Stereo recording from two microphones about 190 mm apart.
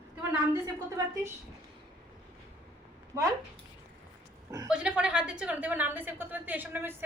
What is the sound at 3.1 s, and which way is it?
Speech, 15° right (ahead or behind).